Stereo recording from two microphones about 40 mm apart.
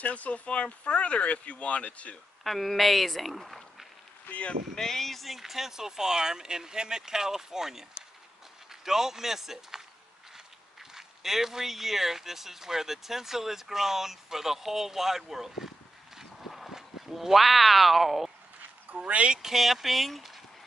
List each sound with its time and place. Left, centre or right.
0.0 s speech: left
2.4 s speech: centre
4.3 s speech: left
4.7 s speech: centre
8.8 s speech: centre
11.0 s speech: centre
18.9 s speech: right
19.4 s speech: centre